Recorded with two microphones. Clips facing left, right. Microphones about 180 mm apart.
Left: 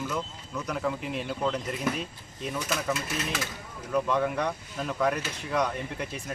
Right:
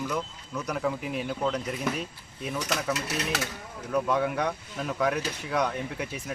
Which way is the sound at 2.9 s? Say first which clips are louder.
Right 1 dB; 70° right (ahead or behind).